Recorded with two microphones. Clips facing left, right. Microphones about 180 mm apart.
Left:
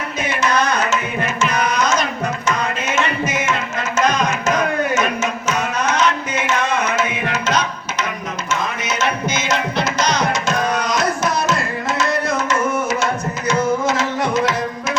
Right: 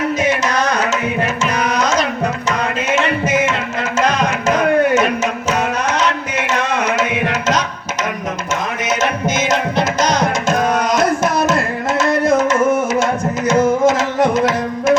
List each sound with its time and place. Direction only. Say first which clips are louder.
0.3 s music: right 2 dB; 40° right (ahead or behind)
2.8 s music: right 5 dB; 55° right (ahead or behind)
4.9 s music: right 4 dB; 35° right (ahead or behind)
6.6 s tabla: right 3 dB; 65° right (ahead or behind)
8.8 s music: right 3 dB; 50° right (ahead or behind)
13.5 s tabla: right 5 dB; 50° right (ahead or behind)